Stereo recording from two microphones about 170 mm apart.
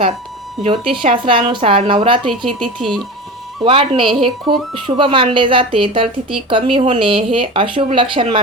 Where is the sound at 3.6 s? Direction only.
30° right (ahead or behind).